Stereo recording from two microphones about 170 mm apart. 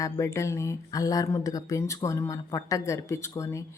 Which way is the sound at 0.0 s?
20° left (ahead or behind).